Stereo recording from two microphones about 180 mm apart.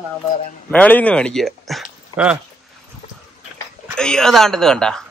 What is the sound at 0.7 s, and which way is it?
Speech, 10° left (ahead or behind).